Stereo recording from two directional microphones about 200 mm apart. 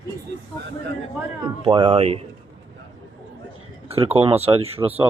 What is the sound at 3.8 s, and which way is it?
Speech, 30° right (ahead or behind).